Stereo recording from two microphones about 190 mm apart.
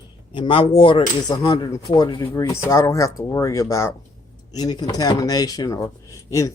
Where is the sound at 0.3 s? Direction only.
30° left (ahead or behind).